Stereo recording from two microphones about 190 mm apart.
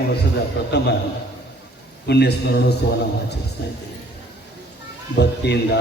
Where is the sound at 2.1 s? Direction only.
60° left (ahead or behind).